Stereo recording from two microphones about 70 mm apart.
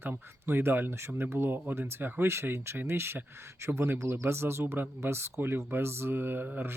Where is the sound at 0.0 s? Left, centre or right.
Right.